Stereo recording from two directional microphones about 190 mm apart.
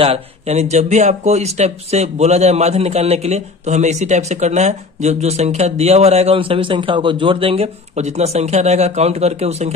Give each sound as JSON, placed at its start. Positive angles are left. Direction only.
{"t": 0.0, "sound": "speech", "side_deg": -35}